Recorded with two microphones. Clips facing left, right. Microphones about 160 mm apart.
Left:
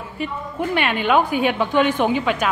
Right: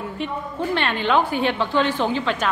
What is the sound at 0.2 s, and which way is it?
A woman's voice, 10° left (ahead or behind).